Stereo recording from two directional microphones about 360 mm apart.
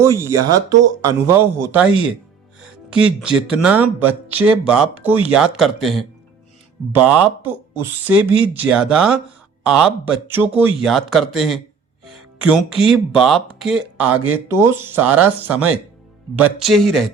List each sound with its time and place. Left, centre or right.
0.0 s speech: centre
7.1 s speech: centre